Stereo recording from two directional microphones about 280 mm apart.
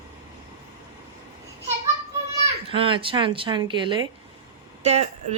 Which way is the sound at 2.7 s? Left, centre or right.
Centre.